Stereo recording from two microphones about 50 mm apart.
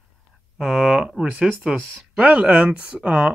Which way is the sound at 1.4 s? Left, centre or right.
Right.